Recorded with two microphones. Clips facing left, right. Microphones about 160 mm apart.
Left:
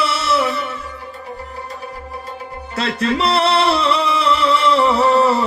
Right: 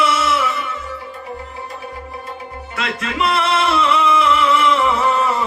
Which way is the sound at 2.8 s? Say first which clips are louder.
Left 3 dB; 35° left (ahead or behind).